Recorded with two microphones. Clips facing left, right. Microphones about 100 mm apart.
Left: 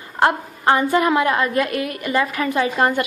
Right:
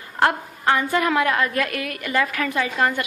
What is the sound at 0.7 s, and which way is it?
A woman's voice, 25° left (ahead or behind).